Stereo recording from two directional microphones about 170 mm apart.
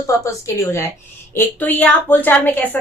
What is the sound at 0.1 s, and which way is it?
Speech, 15° left (ahead or behind).